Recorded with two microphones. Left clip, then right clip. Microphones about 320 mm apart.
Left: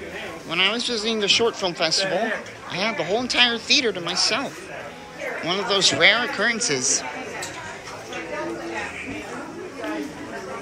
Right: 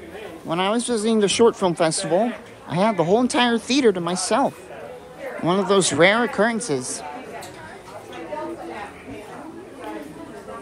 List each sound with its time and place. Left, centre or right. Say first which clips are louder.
0.5 s speech: even; centre
6.8 s speech: left 8 dB; centre